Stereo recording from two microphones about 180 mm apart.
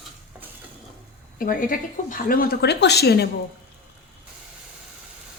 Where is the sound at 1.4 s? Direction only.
50° left (ahead or behind).